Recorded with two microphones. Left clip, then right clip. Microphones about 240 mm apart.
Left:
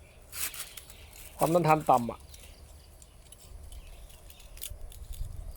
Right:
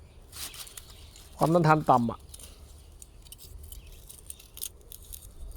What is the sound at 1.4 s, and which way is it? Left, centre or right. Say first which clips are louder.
Speech: right 1 dB; right.